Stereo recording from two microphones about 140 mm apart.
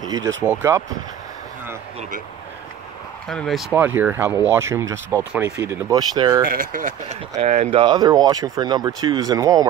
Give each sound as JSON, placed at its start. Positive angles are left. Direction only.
{"t": 0.1, "sound": "speech", "side_deg": -25}
{"t": 3.3, "sound": "speech", "side_deg": 5}
{"t": 3.7, "sound": "speech", "side_deg": -15}
{"t": 6.1, "sound": "speech", "side_deg": -35}
{"t": 6.4, "sound": "speech", "side_deg": -85}
{"t": 7.1, "sound": "speech", "side_deg": -50}
{"t": 7.7, "sound": "speech", "side_deg": -35}